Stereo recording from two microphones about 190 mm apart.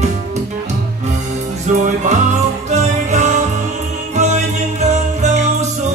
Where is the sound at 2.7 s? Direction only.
40° right (ahead or behind).